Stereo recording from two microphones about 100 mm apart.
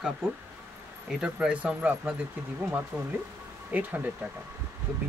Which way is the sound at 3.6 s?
15° right (ahead or behind).